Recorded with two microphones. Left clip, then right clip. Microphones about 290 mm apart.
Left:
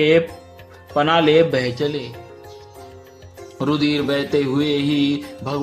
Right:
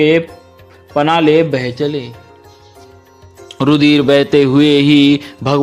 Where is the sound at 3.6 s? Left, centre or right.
Right.